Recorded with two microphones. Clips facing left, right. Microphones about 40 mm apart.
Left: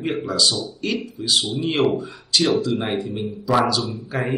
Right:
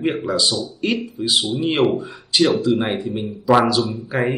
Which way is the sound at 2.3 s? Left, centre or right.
Right.